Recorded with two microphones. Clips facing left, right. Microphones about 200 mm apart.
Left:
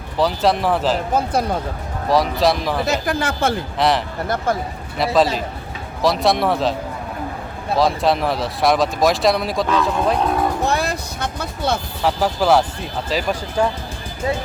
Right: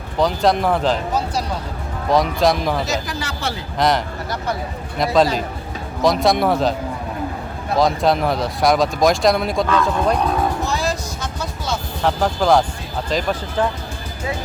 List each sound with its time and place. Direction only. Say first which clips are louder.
0.2 s speech: right 1 dB; centre (ahead or behind)
1.1 s speech: left 3 dB; 55° left (ahead or behind)
2.0 s speech: even; centre (ahead or behind)
2.8 s speech: left 4 dB; 55° left (ahead or behind)
3.8 s speech: right 3 dB; centre (ahead or behind)
7.8 s speech: right 1 dB; centre (ahead or behind)
10.7 s music: left 1 dB; 60° left (ahead or behind)
12.0 s speech: even; 5° left (ahead or behind)